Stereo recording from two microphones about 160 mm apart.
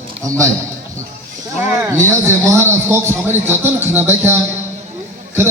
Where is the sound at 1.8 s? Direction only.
15° right (ahead or behind).